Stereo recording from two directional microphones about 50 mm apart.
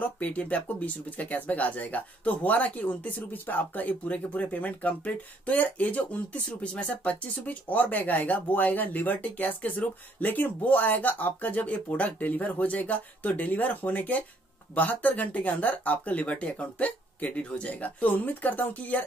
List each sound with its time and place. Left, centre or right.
0.0 s speech: left
3.2 s speech: left